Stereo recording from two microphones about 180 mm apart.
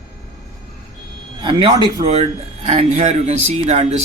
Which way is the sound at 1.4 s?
25° right (ahead or behind).